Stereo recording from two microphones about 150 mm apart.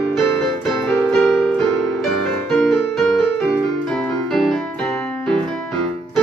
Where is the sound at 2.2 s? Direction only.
Centre (ahead or behind).